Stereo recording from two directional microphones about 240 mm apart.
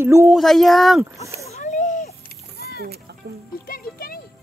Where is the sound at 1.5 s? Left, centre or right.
Left.